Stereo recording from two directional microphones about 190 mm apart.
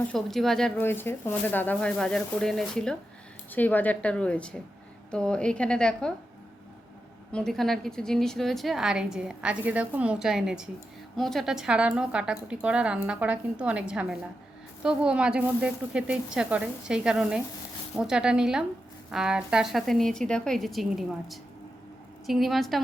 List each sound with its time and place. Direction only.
0.1 s a woman's voice: centre (ahead or behind)
7.3 s a woman's voice: centre (ahead or behind)